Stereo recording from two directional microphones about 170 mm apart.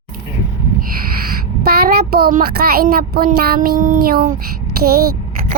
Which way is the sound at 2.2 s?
65° right (ahead or behind).